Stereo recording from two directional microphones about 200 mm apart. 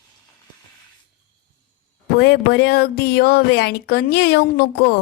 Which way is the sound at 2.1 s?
50° left (ahead or behind).